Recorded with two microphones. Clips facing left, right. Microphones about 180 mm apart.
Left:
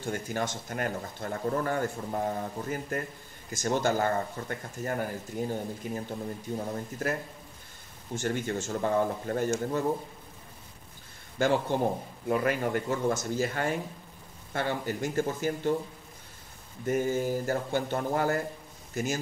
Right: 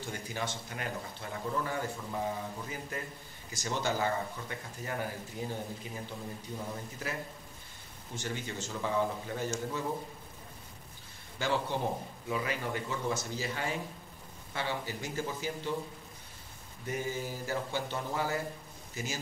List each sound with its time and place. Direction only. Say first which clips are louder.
0.0 s speech: left 6 dB; 50° left (ahead or behind)
8.2 s speech: left 8 dB; 50° left (ahead or behind)
11.3 s speech: left 6 dB; 50° left (ahead or behind)
16.8 s speech: left 8 dB; 50° left (ahead or behind)